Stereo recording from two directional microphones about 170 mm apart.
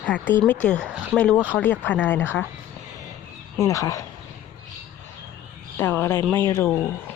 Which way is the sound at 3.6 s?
20° left (ahead or behind).